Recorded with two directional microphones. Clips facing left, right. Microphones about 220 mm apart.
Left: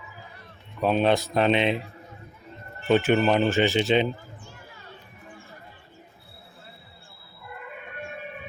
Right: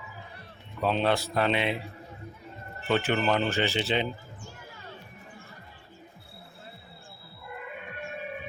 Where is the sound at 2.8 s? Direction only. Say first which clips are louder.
Left 6 dB; 15° left (ahead or behind).